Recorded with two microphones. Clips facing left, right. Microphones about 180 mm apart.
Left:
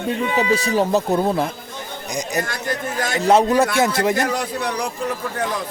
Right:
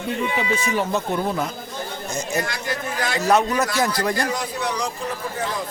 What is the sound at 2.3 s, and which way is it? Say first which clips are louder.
Speech: left 2 dB; 50° left (ahead or behind).